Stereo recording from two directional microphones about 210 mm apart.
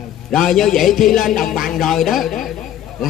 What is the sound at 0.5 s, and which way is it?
Speech, centre (ahead or behind).